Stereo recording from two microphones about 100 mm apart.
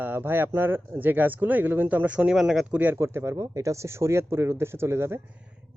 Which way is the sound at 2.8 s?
20° right (ahead or behind).